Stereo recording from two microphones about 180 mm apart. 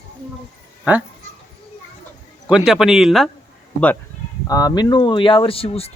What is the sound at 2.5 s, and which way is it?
Speech, 5° right (ahead or behind).